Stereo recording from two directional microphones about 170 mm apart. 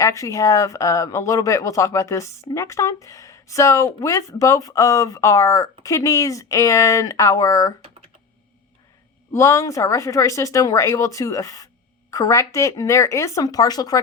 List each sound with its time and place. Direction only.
0.0 s speech: 20° left (ahead or behind)
9.3 s speech: 15° left (ahead or behind)